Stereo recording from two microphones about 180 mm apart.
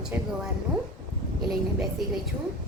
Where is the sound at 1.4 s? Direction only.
Centre (ahead or behind).